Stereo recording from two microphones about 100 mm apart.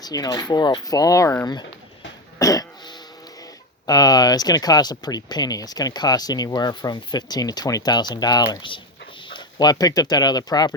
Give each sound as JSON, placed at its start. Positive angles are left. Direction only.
{"t": 0.0, "sound": "speech", "side_deg": 40}
{"t": 2.4, "sound": "throat clearing", "side_deg": 35}
{"t": 3.8, "sound": "speech", "side_deg": 40}